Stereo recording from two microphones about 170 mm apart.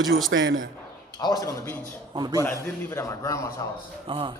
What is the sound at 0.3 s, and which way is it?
Speech, 90° right.